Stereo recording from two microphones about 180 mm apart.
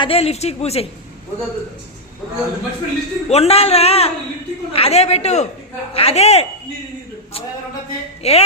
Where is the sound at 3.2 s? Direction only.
35° left (ahead or behind).